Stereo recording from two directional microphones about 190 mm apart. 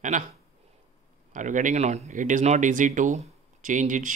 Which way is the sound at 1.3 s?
40° right (ahead or behind).